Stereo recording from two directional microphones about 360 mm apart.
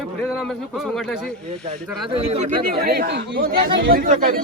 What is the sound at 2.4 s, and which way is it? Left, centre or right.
Speech, right.